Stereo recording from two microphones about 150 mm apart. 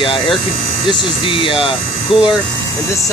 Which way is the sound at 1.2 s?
35° left (ahead or behind).